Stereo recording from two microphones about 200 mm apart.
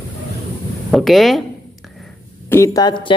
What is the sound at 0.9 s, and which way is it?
Speech, centre (ahead or behind).